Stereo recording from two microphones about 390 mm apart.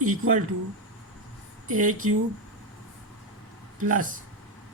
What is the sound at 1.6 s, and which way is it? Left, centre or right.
Speech, centre.